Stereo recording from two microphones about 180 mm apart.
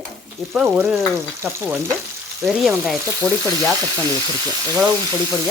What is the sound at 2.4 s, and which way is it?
Speech, centre (ahead or behind).